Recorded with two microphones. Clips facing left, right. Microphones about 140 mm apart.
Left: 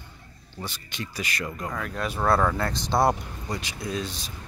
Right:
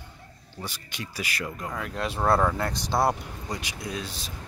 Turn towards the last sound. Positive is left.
turn(degrees=-10)  # may be behind; listen again after turning